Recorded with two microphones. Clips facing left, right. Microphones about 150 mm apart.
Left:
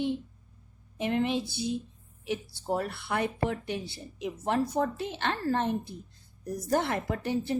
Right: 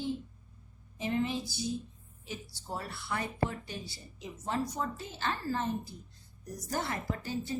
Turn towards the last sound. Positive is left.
turn(degrees=65)  # may be behind; listen again after turning